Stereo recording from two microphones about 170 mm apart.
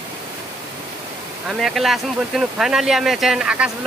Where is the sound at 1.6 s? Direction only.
Centre (ahead or behind).